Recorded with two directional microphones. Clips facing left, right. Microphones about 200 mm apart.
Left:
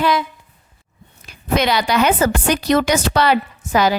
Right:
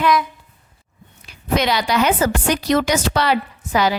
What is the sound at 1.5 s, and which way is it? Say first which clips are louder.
A woman's voice: left 1 dB; 55° left (ahead or behind).